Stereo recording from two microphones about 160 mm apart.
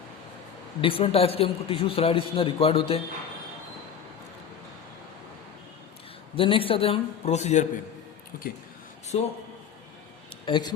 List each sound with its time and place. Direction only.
0.8 s a man's voice: 35° left (ahead or behind)
6.3 s a man's voice: 35° left (ahead or behind)
9.1 s a man's voice: 35° left (ahead or behind)
10.4 s a man's voice: 30° left (ahead or behind)